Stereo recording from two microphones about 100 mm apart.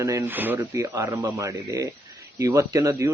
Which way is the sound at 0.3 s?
20° right (ahead or behind).